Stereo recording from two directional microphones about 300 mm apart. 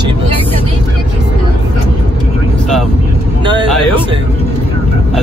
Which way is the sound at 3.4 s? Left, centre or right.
Centre.